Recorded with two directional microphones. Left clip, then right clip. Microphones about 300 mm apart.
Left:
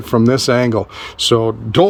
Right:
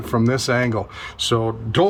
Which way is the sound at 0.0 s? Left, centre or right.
Left.